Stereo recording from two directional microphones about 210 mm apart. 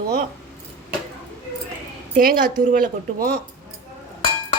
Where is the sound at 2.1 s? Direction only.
45° right (ahead or behind).